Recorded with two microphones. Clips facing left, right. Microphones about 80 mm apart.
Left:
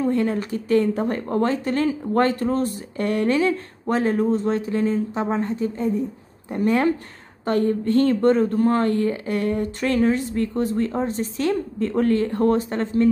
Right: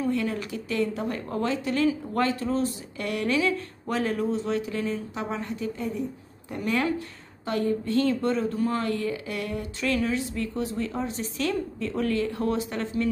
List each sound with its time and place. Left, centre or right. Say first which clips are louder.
0.0 s speech: left 6 dB; left
7.4 s speech: left 6 dB; left